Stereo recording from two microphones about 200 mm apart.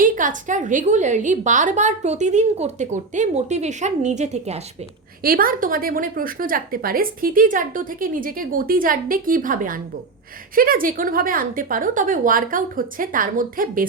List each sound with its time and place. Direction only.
0.0 s a woman's voice: 40° right (ahead or behind)
5.2 s a woman's voice: 45° right (ahead or behind)